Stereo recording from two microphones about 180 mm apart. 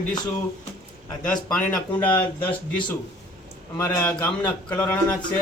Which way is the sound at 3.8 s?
15° left (ahead or behind).